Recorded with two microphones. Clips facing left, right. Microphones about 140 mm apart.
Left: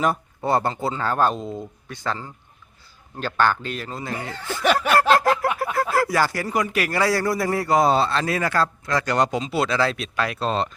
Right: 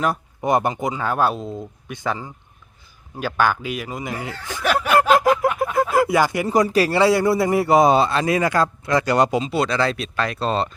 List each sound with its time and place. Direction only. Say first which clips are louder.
0.4 s speech: right 2 dB; 15° right (ahead or behind); by 1.6 s centre (ahead or behind)
1.9 s speech: right 3 dB; 15° right (ahead or behind)
4.4 s a sound: left 1 dB; 10° right (ahead or behind)
6.5 s speech: right 6 dB; 35° right (ahead or behind); by 9.5 s 10° right (ahead or behind)
9.5 s speech: right 1 dB; centre (ahead or behind)